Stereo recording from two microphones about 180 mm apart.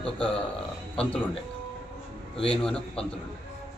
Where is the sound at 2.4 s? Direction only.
5° left (ahead or behind).